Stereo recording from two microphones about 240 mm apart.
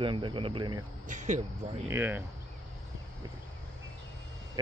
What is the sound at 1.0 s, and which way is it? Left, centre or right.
Speech, right.